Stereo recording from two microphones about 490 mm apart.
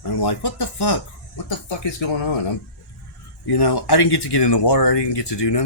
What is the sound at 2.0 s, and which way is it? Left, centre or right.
Speech, left.